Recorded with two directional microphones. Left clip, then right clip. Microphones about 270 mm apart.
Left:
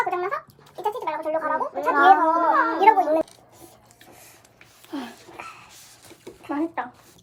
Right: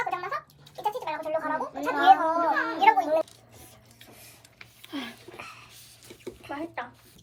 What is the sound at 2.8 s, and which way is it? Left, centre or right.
Speech, centre.